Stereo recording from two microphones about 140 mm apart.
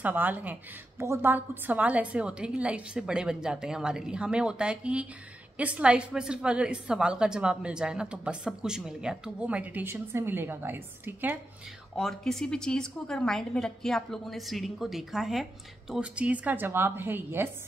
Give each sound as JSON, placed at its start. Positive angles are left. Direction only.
{"t": 0.0, "sound": "a woman's voice", "side_deg": -10}
{"t": 11.9, "sound": "a woman's voice", "side_deg": 5}